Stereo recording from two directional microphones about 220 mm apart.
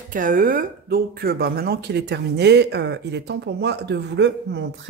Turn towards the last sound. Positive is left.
turn(degrees=-50)  # may be behind; listen again after turning